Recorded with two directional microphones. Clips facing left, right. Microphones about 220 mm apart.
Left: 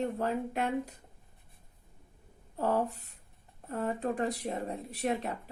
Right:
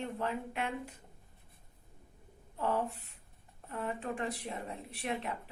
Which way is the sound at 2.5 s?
40° left (ahead or behind).